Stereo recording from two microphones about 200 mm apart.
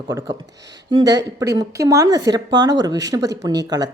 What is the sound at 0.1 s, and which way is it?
Speech, 15° right (ahead or behind).